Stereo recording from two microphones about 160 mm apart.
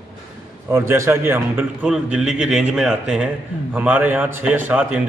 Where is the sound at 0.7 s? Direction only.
15° right (ahead or behind).